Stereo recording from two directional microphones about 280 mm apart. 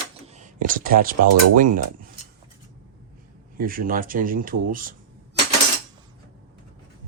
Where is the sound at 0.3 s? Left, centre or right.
Right.